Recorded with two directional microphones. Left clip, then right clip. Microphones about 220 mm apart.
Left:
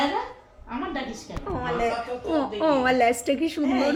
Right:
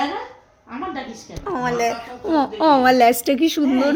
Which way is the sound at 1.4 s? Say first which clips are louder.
Right 6 dB; 55° right (ahead or behind).